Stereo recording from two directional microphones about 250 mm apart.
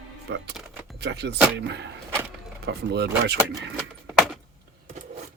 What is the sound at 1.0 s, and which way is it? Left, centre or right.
Speech, right.